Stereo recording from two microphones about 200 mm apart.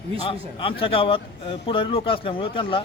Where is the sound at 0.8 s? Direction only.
25° left (ahead or behind).